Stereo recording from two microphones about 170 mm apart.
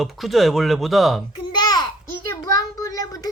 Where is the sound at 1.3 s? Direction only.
25° left (ahead or behind).